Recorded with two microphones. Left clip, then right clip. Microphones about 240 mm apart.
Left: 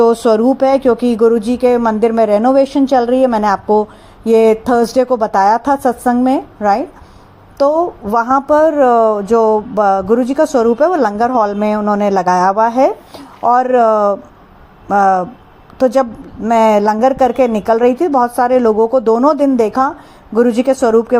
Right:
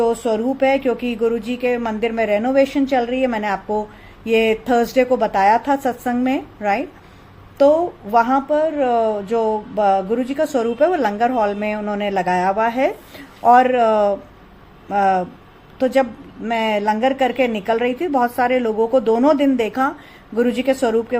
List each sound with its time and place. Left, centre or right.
0.0 s speech: left
5.6 s a woman's voice: centre
6.3 s speech: centre